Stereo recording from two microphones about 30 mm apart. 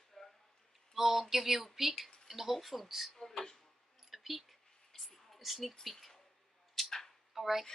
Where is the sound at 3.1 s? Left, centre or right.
Centre.